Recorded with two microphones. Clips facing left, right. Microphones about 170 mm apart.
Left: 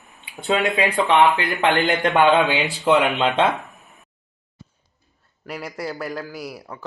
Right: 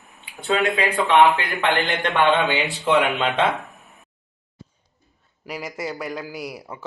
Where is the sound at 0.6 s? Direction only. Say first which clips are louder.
Left 1 dB; 20° left (ahead or behind).